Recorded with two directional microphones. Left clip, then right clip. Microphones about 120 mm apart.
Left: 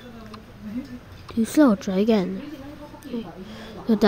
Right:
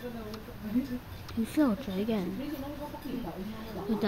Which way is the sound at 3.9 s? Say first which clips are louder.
Left 11 dB; 50° left (ahead or behind).